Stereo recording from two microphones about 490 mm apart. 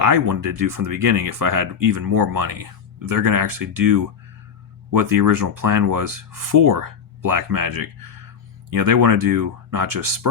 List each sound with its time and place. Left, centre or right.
0.0 s speech: right